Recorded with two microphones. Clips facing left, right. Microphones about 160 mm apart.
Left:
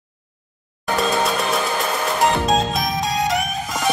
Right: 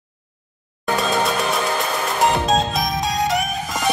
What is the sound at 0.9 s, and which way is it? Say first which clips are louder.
Music: even; centre (ahead or behind).